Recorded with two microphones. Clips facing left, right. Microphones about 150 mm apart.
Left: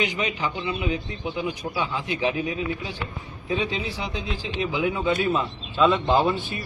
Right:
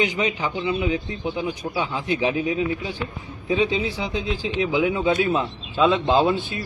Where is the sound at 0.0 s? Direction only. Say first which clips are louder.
Right 3 dB; 25° right (ahead or behind).